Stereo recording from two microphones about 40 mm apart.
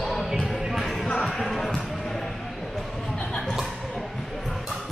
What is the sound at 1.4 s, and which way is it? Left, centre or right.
Basketball bounce, centre.